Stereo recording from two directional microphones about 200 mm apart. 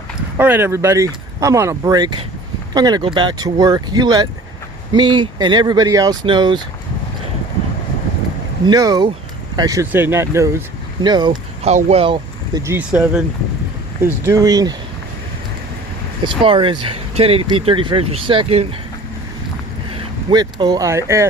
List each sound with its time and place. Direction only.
0.3 s speech: 10° right (ahead or behind)
8.6 s speech: 20° right (ahead or behind)
11.7 s speech: 35° right (ahead or behind)
12.6 s speech: 10° right (ahead or behind)
14.3 s speech: 15° right (ahead or behind)
16.2 s speech: 25° right (ahead or behind)
19.9 s speech: 25° right (ahead or behind)